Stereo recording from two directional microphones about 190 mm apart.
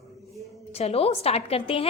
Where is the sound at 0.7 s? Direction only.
30° left (ahead or behind).